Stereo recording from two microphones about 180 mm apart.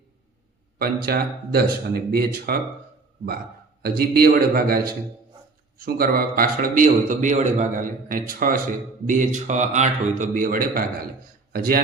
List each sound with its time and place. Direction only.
0.8 s speech: 55° right (ahead or behind)
3.8 s a man's voice: 60° right (ahead or behind)